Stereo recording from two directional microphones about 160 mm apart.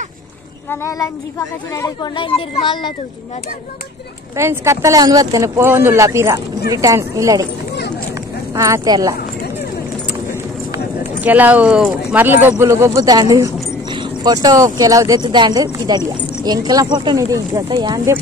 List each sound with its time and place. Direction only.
0.7 s speech: 20° left (ahead or behind)
2.1 s speech: 35° left (ahead or behind)
4.4 s speech: 15° right (ahead or behind)
8.5 s speech: 20° right (ahead or behind)
11.1 s speech: 10° right (ahead or behind)